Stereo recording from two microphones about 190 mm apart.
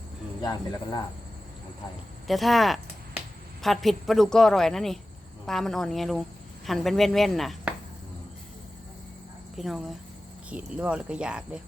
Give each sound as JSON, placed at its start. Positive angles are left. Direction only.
{"t": 0.4, "sound": "speech", "side_deg": 20}
{"t": 2.2, "sound": "speech", "side_deg": 0}
{"t": 9.6, "sound": "speech", "side_deg": 0}